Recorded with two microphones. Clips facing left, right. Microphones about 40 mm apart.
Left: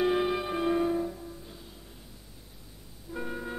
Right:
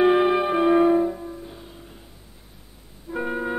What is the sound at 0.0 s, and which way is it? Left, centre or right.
Music, right.